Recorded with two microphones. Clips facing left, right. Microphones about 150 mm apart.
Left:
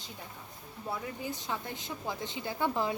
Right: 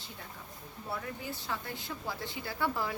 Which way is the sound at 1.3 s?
20° left (ahead or behind).